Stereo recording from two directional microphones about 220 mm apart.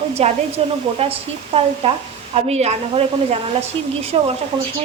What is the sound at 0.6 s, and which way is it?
Speech, 25° right (ahead or behind).